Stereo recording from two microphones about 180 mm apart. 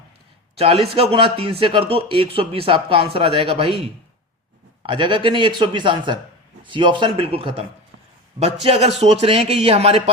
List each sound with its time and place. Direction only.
0.5 s a man's voice: 35° right (ahead or behind)
4.9 s a man's voice: 25° right (ahead or behind)